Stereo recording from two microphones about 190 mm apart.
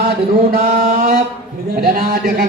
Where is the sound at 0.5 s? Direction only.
50° right (ahead or behind).